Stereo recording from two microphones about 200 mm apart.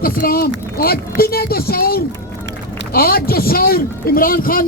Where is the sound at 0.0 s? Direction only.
45° left (ahead or behind).